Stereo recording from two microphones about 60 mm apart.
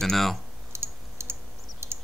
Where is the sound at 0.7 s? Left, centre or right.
Right.